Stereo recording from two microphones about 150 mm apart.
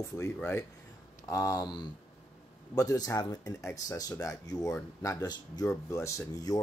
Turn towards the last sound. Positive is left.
turn(degrees=20)  # may be behind; listen again after turning